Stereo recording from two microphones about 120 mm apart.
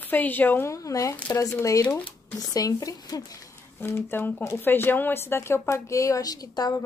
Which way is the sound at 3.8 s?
20° left (ahead or behind).